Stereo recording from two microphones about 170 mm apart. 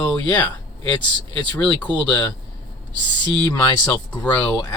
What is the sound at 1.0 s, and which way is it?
Speech, 30° left (ahead or behind).